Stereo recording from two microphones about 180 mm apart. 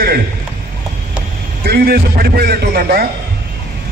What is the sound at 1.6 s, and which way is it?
A man's voice, 60° right (ahead or behind).